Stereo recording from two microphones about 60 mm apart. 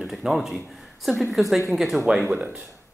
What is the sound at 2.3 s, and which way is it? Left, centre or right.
Speech, centre.